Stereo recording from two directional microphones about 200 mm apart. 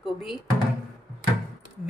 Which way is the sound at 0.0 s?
Centre (ahead or behind).